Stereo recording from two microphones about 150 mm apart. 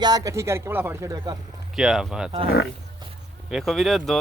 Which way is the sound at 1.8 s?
5° right (ahead or behind).